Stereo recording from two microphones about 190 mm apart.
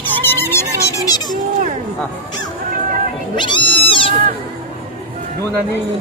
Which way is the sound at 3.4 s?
25° left (ahead or behind).